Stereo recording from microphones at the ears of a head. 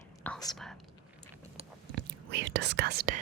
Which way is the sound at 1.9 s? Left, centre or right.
Right.